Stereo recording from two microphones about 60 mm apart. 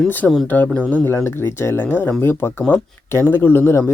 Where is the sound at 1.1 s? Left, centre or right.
Left.